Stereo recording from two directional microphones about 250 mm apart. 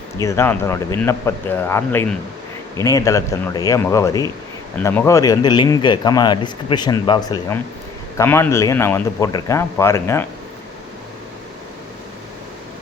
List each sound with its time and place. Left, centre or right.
0.2 s speech: centre